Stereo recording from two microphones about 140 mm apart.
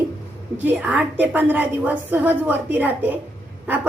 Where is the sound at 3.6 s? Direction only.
10° right (ahead or behind).